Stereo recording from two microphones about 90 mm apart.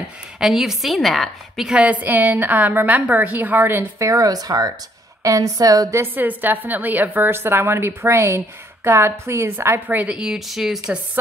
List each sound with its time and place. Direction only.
0.4 s a woman's voice: centre (ahead or behind); by 4.1 s 25° right (ahead or behind)
4.1 s speech: 45° right (ahead or behind)
6.1 s a woman's voice: 20° right (ahead or behind)
9.8 s a woman's voice: 20° right (ahead or behind)
10.1 s speech: 5° right (ahead or behind)